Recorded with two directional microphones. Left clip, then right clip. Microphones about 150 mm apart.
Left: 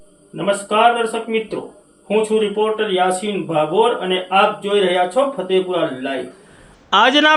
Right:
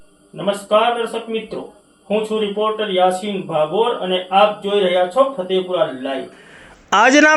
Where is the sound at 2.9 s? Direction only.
30° left (ahead or behind).